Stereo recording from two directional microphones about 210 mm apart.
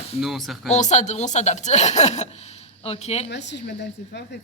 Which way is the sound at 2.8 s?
30° left (ahead or behind).